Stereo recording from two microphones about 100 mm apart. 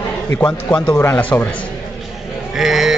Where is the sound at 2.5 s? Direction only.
5° right (ahead or behind).